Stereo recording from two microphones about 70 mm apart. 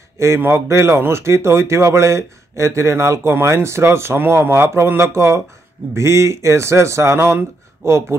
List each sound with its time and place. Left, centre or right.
0.4 s speech: right